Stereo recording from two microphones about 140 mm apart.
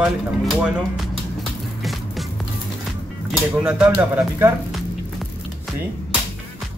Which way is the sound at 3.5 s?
10° right (ahead or behind).